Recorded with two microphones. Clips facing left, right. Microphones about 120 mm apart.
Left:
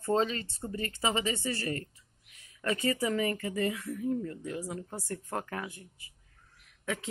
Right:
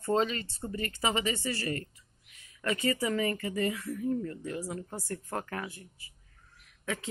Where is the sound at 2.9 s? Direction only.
15° left (ahead or behind).